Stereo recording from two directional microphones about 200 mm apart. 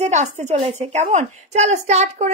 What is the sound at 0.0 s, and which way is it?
A woman's voice, 35° right (ahead or behind).